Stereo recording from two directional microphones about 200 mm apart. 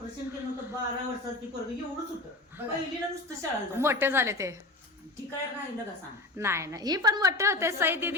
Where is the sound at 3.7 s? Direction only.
10° right (ahead or behind).